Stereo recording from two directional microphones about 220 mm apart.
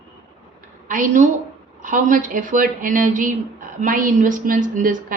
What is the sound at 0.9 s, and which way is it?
A woman's voice, 35° right (ahead or behind).